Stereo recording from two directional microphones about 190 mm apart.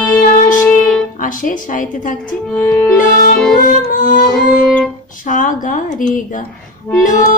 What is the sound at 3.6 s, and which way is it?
Music, 45° left (ahead or behind).